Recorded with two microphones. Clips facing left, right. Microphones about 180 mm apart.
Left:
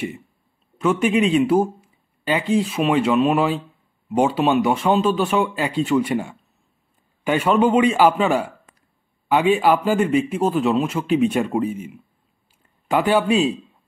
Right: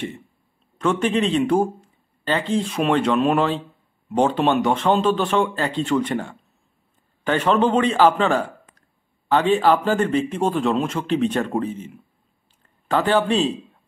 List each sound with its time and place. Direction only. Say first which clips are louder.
0.7 s a man's voice: left 2 dB; 10° left (ahead or behind)